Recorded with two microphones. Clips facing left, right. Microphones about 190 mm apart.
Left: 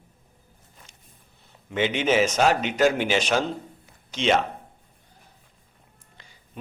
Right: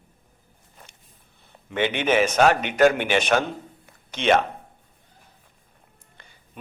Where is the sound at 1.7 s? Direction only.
55° right (ahead or behind).